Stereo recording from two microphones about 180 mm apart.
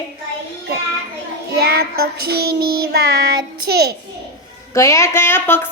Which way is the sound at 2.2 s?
60° right (ahead or behind).